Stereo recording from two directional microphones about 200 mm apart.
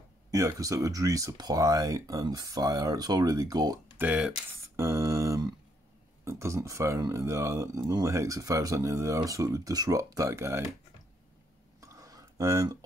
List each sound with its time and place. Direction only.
0.3 s speech: 15° right (ahead or behind)
4.0 s speech: 5° right (ahead or behind)
11.8 s a sound: 15° right (ahead or behind)